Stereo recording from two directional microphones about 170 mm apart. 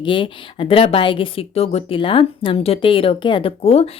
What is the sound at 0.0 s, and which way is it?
A woman's voice, 30° left (ahead or behind).